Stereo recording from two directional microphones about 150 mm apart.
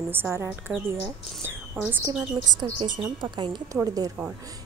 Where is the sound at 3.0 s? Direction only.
30° right (ahead or behind).